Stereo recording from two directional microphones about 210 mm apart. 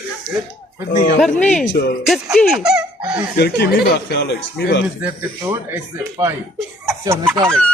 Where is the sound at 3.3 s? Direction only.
50° left (ahead or behind).